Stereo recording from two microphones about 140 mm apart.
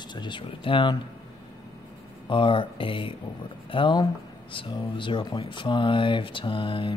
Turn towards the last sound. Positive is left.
turn(degrees=35)  # may be behind; listen again after turning